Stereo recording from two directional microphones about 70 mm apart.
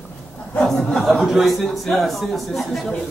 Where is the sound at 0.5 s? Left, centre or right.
Centre.